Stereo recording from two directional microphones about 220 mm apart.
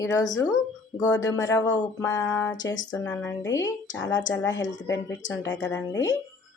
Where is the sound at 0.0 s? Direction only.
15° left (ahead or behind).